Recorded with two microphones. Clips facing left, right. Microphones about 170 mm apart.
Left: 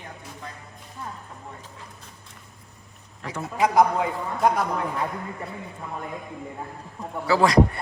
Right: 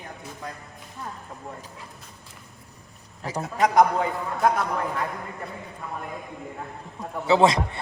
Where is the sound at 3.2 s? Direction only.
35° right (ahead or behind).